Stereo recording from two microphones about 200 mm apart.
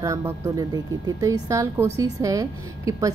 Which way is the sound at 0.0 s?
15° right (ahead or behind).